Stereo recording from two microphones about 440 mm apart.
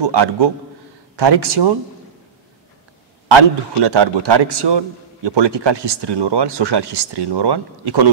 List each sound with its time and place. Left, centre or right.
0.0 s a man's voice: right
3.3 s a man's voice: right